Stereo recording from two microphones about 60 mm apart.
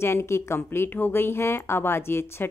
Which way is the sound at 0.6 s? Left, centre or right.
Left.